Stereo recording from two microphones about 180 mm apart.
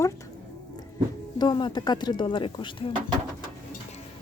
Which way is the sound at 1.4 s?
25° left (ahead or behind).